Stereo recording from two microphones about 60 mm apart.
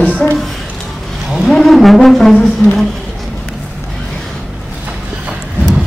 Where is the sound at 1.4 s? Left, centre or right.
Centre.